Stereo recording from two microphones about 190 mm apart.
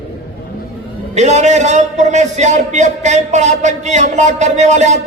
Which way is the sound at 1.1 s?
35° right (ahead or behind).